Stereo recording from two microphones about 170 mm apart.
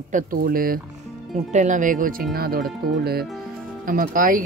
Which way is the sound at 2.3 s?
65° right (ahead or behind).